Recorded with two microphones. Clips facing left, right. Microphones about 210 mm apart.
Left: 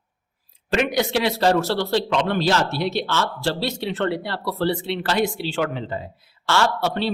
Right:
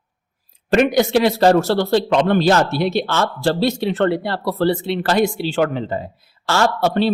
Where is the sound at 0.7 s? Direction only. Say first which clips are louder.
Right 6 dB; 50° right (ahead or behind).